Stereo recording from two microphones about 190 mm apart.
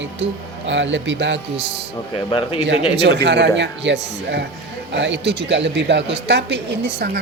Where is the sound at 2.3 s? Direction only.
25° left (ahead or behind).